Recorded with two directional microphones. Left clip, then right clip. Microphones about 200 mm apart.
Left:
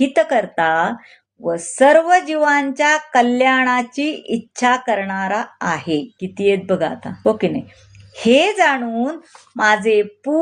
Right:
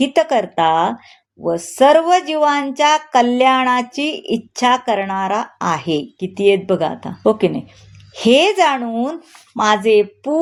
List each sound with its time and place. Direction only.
0.0 s speech: 25° right (ahead or behind)